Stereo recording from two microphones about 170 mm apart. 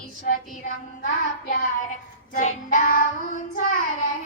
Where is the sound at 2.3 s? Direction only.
50° left (ahead or behind).